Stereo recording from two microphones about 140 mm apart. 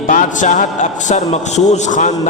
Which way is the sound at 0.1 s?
65° left (ahead or behind).